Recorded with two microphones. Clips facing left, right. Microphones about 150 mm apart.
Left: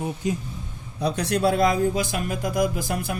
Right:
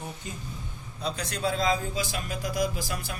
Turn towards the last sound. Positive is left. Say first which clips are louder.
# left 6 dB
turn(degrees=55)  # may be behind; listen again after turning